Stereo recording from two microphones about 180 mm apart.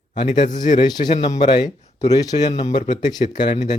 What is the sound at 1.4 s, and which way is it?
Speech, 25° left (ahead or behind).